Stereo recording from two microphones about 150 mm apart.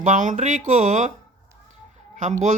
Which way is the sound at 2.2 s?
55° right (ahead or behind).